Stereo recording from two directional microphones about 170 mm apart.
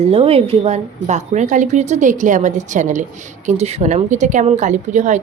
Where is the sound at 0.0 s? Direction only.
35° right (ahead or behind).